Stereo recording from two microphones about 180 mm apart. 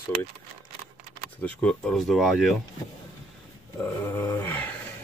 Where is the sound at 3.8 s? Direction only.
15° left (ahead or behind).